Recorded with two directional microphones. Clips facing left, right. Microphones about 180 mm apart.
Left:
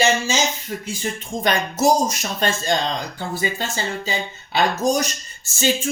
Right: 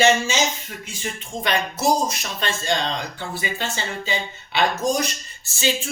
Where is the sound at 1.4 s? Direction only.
45° left (ahead or behind).